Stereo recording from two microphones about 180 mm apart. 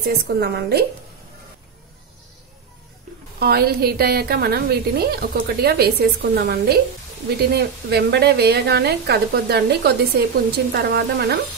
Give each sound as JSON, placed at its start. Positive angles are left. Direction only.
{"t": 0.0, "sound": "a woman's voice", "side_deg": -60}
{"t": 3.3, "sound": "a woman's voice", "side_deg": -60}